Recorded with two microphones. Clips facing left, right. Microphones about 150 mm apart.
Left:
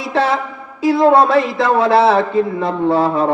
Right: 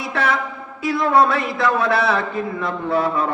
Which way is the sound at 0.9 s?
25° left (ahead or behind).